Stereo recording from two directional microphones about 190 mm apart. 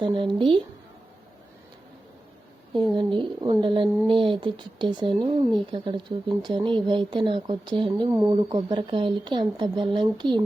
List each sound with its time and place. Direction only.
0.0 s speech: 25° right (ahead or behind)
2.7 s speech: 25° right (ahead or behind)